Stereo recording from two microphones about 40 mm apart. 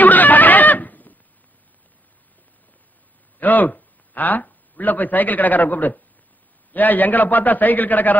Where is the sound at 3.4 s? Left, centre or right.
Left.